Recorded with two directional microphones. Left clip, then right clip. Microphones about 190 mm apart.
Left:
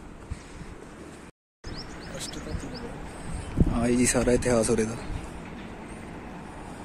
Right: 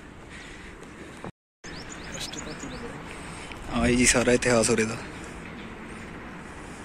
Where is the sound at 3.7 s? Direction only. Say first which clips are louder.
Right 3 dB; 5° left (ahead or behind).